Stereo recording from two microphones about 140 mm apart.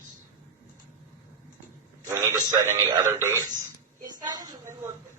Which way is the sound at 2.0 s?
20° right (ahead or behind).